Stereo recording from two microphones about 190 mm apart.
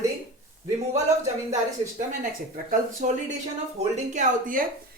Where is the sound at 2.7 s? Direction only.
40° right (ahead or behind).